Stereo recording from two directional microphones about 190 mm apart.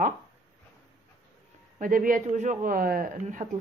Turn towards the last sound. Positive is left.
turn(degrees=-45)  # may be behind; listen again after turning